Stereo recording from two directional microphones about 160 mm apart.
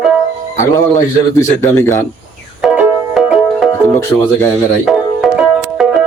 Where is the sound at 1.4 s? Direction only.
15° left (ahead or behind).